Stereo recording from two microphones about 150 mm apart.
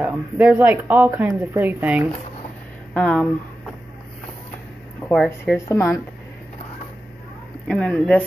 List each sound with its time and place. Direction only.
0.0 s speech: 10° right (ahead or behind)
2.9 s speech: 5° left (ahead or behind)
5.0 s speech: 5° left (ahead or behind)
5.4 s speech: 20° left (ahead or behind)
7.6 s speech: 5° left (ahead or behind)